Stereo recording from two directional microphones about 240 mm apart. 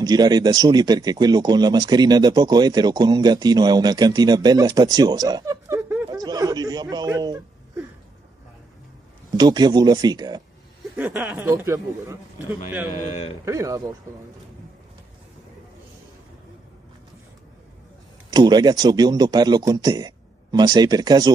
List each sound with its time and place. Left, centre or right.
0.0 s speech: centre
5.8 s a sound: centre
9.3 s speech: centre
11.0 s speech: centre
13.0 s a man's voice: left
13.5 s speech: centre
18.3 s speech: centre